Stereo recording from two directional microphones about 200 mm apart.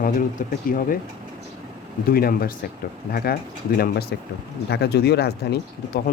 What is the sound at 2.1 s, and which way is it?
Speech, 50° left (ahead or behind).